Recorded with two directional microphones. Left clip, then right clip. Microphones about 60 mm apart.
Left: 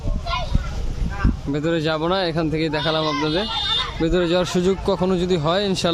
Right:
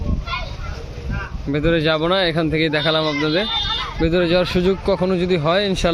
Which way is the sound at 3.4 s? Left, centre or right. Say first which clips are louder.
Right 1 dB; right.